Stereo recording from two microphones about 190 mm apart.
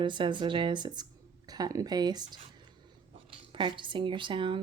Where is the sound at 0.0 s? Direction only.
25° right (ahead or behind).